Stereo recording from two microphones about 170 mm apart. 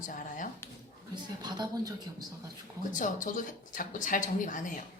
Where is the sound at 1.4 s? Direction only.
25° right (ahead or behind).